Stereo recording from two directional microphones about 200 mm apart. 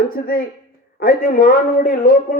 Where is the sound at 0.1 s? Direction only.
45° left (ahead or behind).